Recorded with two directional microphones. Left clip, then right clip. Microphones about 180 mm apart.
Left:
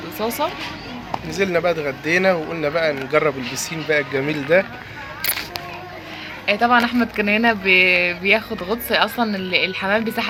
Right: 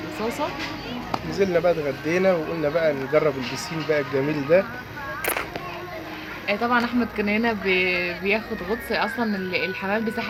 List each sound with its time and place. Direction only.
1.1 s speech: 5° left (ahead or behind)
6.4 s speech: 15° left (ahead or behind)